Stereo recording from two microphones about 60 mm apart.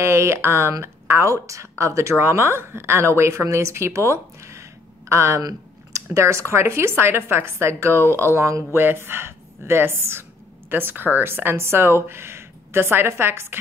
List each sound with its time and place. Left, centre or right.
0.0 s speech: right
5.4 s a woman's voice: right